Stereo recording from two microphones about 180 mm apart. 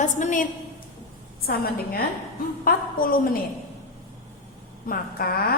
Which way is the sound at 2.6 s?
50° left (ahead or behind).